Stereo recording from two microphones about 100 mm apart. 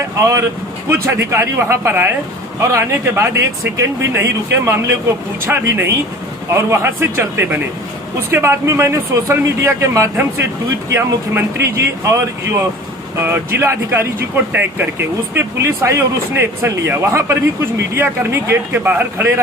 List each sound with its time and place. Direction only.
0.9 s speech: 30° right (ahead or behind)